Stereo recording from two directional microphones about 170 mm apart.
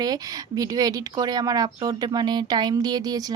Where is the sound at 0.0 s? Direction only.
20° right (ahead or behind).